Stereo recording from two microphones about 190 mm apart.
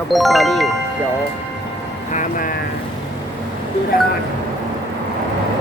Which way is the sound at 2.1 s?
45° left (ahead or behind).